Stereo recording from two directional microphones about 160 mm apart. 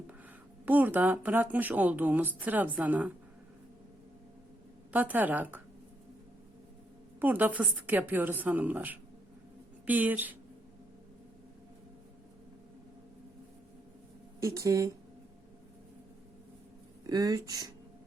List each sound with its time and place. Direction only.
0.6 s speech: 10° right (ahead or behind)
4.9 s speech: 10° right (ahead or behind)
7.2 s speech: 10° right (ahead or behind)
14.4 s speech: 20° right (ahead or behind)
17.1 s speech: 25° right (ahead or behind)